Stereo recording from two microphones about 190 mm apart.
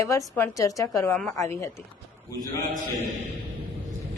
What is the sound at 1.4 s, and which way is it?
Speech, 15° left (ahead or behind).